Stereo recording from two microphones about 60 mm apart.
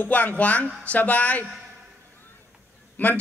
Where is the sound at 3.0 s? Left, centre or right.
Left.